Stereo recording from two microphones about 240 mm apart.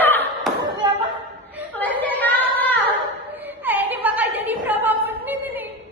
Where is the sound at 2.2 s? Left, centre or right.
Centre.